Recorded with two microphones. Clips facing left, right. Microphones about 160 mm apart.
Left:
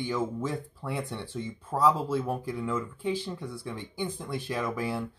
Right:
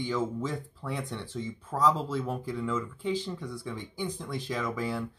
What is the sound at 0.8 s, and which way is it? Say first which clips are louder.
Speech: left 1 dB; 10° left (ahead or behind).